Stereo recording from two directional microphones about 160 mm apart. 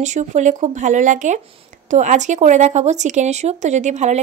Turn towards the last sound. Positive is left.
turn(degrees=-45)  # may be behind; listen again after turning